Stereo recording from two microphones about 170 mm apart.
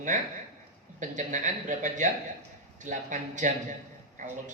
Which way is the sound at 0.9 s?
50° right (ahead or behind).